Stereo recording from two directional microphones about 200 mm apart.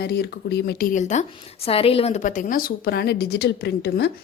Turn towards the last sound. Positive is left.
turn(degrees=55)  # may be behind; listen again after turning